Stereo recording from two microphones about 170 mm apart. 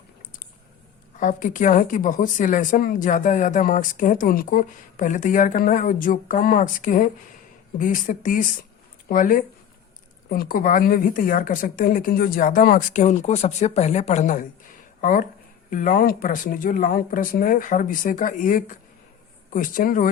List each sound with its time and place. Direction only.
1.2 s speech: 50° left (ahead or behind)